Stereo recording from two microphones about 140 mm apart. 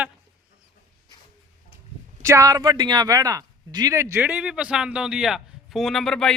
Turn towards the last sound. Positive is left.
turn(degrees=5)  # may be behind; listen again after turning